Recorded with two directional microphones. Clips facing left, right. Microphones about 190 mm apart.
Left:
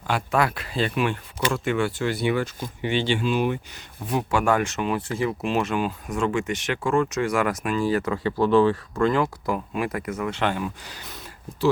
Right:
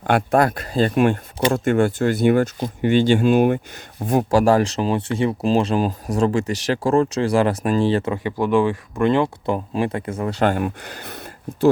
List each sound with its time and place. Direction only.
0.0 s speech: 55° right (ahead or behind); by 10.6 s 40° right (ahead or behind)
10.6 s speech: 60° right (ahead or behind)